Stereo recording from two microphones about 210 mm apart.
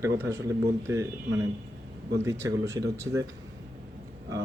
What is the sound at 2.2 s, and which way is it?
Speech, 15° right (ahead or behind).